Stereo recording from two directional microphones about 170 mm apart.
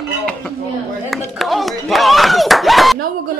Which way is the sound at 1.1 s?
Centre (ahead or behind).